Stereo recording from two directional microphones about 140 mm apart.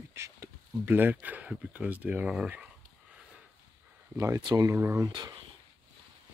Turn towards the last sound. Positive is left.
turn(degrees=-30)  # may be behind; listen again after turning